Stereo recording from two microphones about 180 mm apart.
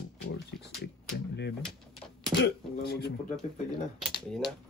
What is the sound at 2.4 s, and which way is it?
Throat clearing, 65° left (ahead or behind).